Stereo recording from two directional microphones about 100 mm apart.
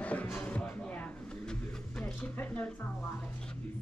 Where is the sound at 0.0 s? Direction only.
15° left (ahead or behind).